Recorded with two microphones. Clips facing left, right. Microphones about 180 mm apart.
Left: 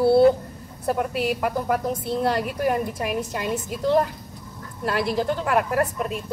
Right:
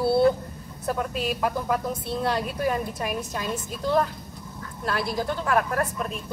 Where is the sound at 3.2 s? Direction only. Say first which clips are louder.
Left 3 dB; 10° left (ahead or behind).